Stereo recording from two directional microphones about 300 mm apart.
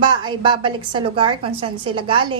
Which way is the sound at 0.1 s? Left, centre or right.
Centre.